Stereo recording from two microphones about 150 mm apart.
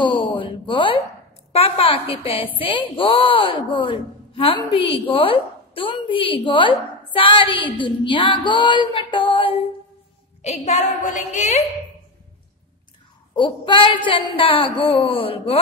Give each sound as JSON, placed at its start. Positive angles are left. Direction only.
{"t": 0.0, "sound": "a sound", "side_deg": 35}
{"t": 1.5, "sound": "a woman's voice", "side_deg": 40}
{"t": 10.4, "sound": "a woman's voice", "side_deg": 50}
{"t": 13.3, "sound": "a woman's voice", "side_deg": 35}